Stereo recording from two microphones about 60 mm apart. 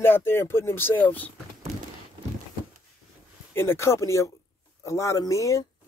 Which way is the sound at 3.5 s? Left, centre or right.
Left.